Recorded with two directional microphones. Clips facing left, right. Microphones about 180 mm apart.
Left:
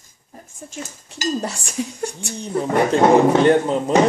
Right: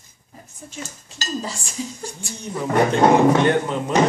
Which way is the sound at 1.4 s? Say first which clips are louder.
Left 4 dB; 70° left (ahead or behind).